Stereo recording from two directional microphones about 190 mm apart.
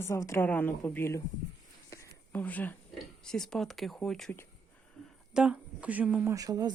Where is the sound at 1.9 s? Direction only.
10° left (ahead or behind).